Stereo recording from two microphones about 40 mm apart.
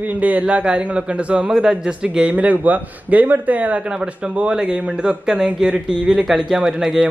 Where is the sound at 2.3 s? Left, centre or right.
Right.